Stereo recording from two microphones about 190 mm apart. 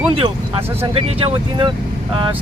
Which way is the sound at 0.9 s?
25° right (ahead or behind).